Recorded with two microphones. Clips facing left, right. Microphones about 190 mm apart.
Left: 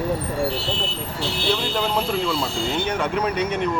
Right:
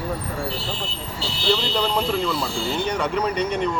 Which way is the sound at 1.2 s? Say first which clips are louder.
Right 1 dB; 55° left (ahead or behind).